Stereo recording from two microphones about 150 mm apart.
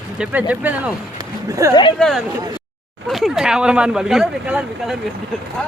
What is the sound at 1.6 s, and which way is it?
Speech, 20° right (ahead or behind).